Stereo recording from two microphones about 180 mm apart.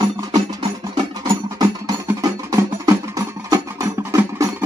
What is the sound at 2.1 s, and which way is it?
Music, 20° right (ahead or behind).